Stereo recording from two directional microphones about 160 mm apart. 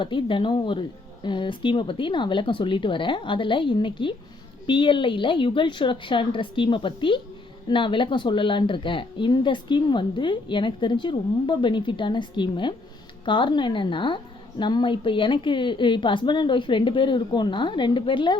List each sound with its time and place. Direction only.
0.0 s a woman's voice: 30° left (ahead or behind)